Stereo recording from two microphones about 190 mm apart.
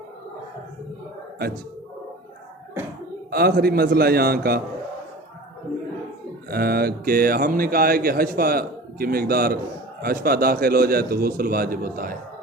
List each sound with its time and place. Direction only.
3.2 s a man's voice: 55° right (ahead or behind)
6.5 s a man's voice: 55° right (ahead or behind)